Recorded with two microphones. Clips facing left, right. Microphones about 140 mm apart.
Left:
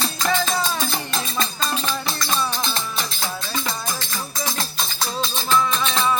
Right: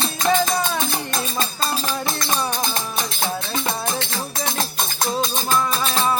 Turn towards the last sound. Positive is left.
turn(degrees=-35)  # may be behind; listen again after turning